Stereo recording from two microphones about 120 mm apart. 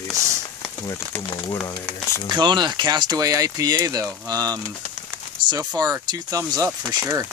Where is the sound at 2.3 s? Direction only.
40° right (ahead or behind).